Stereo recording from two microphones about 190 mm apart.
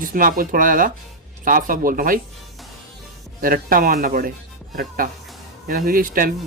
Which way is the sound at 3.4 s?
45° right (ahead or behind).